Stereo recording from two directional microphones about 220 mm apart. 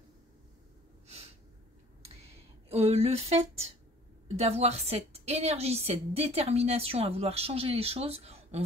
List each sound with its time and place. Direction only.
2.7 s a woman's voice: 25° right (ahead or behind)